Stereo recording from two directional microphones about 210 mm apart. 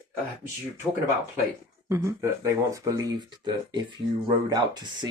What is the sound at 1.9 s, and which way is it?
Speech, 15° right (ahead or behind).